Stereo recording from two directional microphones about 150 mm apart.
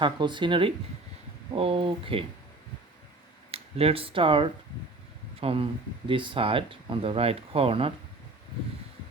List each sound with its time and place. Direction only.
0.0 s speech: 30° right (ahead or behind)
3.5 s speech: 40° right (ahead or behind)